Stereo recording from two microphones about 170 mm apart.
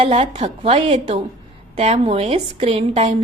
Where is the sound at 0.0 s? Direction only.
35° right (ahead or behind).